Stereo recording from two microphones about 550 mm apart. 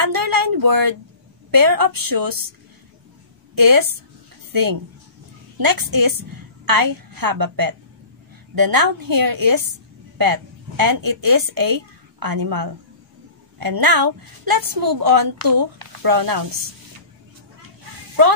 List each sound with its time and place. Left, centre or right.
0.0 s a sound: right
1.5 s a woman's voice: right
3.5 s a woman's voice: right
18.2 s a woman's voice: right